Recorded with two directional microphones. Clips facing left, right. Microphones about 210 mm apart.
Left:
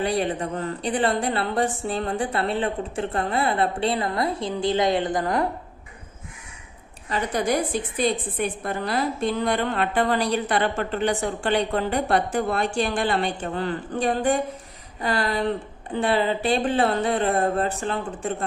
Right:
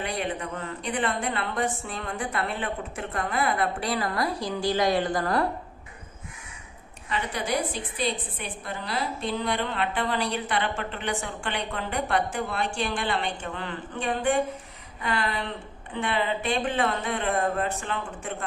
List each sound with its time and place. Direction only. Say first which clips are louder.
0.0 s a woman's voice: left 6 dB; 35° left (ahead or behind)
7.1 s a woman's voice: left 5 dB; 40° left (ahead or behind)